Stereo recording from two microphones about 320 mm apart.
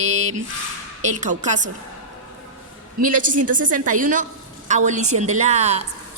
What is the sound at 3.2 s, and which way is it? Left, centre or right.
Speech, right.